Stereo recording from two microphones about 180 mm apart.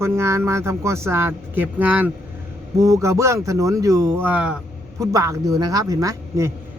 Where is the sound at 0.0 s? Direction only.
15° right (ahead or behind).